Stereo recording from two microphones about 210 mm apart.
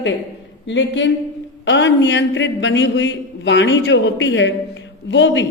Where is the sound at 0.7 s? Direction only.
60° left (ahead or behind).